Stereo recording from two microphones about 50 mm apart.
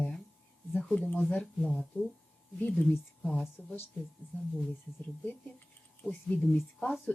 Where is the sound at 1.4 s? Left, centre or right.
Centre.